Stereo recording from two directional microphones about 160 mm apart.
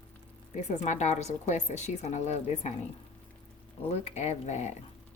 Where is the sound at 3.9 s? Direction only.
45° left (ahead or behind).